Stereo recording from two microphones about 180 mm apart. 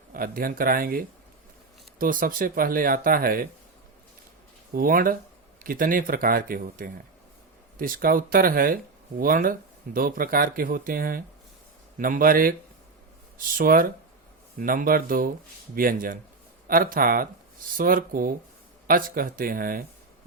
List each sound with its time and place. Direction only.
0.1 s speech: 55° right (ahead or behind)
4.7 s speech: 55° right (ahead or behind)